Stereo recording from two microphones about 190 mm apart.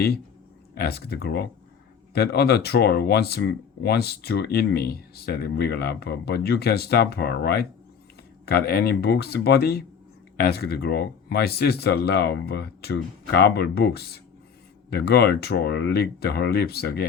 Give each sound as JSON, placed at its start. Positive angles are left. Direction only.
{"t": 0.7, "sound": "speech", "side_deg": 55}